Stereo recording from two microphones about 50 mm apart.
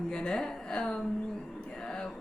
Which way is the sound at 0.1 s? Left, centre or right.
Centre.